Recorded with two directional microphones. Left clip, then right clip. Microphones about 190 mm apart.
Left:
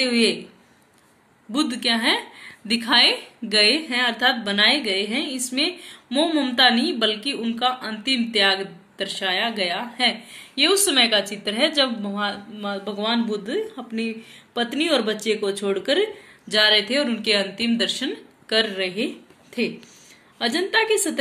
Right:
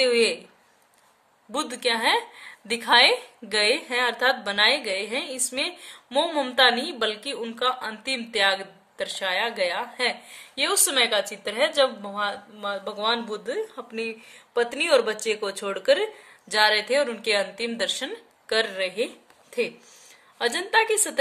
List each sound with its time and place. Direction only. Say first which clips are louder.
0.0 s a woman's voice: even; 55° right (ahead or behind)
1.5 s a woman's voice: left 3 dB; 55° right (ahead or behind)